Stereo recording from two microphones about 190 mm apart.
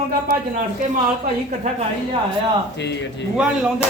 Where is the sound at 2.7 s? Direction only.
65° left (ahead or behind).